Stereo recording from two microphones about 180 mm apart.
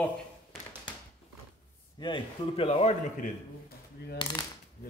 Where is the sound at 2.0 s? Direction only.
30° left (ahead or behind).